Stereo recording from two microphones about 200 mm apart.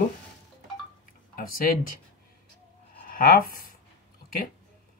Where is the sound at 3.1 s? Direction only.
45° left (ahead or behind).